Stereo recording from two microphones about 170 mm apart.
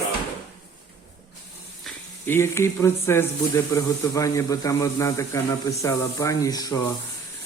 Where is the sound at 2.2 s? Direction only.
15° left (ahead or behind).